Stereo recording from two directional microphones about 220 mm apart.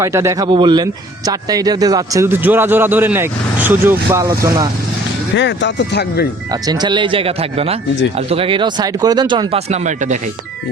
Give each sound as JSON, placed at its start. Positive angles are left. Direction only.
{"t": 0.0, "sound": "speech", "side_deg": -10}
{"t": 5.3, "sound": "speech", "side_deg": 55}
{"t": 6.5, "sound": "speech", "side_deg": -20}